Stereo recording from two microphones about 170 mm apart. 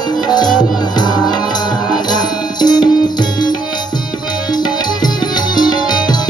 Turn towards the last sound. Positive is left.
turn(degrees=25)  # may be behind; listen again after turning